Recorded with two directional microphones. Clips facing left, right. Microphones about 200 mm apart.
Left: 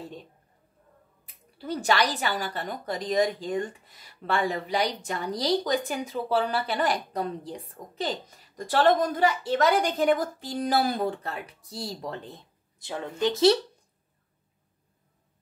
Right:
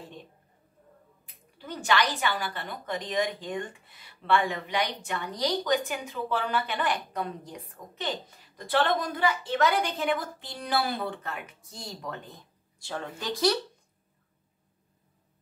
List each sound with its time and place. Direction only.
1.6 s a woman's voice: 35° left (ahead or behind)